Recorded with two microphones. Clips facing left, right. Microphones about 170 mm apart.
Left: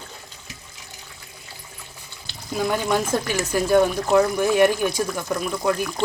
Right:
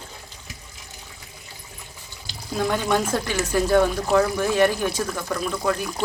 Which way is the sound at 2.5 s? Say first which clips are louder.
Even; 10° left (ahead or behind).